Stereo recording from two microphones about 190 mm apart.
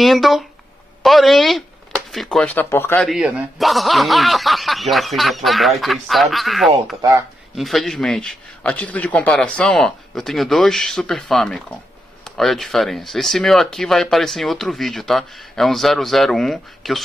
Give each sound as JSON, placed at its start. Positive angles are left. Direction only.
{"t": 0.0, "sound": "speech", "side_deg": 0}
{"t": 3.1, "sound": "speech", "side_deg": -5}
{"t": 7.0, "sound": "speech", "side_deg": -20}
{"t": 7.5, "sound": "speech", "side_deg": 0}